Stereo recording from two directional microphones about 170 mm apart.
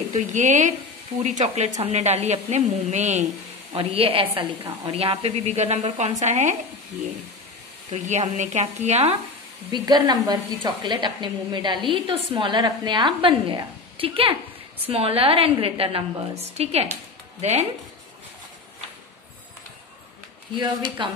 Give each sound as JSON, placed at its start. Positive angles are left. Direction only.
{"t": 0.1, "sound": "speech", "side_deg": -45}
{"t": 7.9, "sound": "speech", "side_deg": -45}
{"t": 9.7, "sound": "a woman's voice", "side_deg": -25}
{"t": 21.0, "sound": "a woman's voice", "side_deg": -30}